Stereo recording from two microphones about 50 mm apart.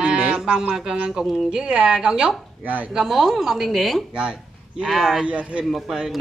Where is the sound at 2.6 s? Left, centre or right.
Right.